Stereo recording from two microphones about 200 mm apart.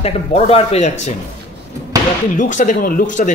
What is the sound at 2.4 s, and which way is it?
Speech, 40° left (ahead or behind).